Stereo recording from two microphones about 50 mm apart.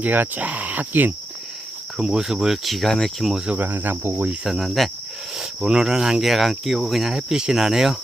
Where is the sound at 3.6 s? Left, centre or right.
Right.